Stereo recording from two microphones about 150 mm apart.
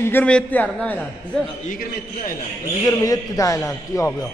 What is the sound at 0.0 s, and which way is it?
Speech, 10° left (ahead or behind).